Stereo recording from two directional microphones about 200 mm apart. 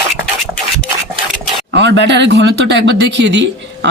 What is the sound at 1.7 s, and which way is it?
Speech, 60° right (ahead or behind).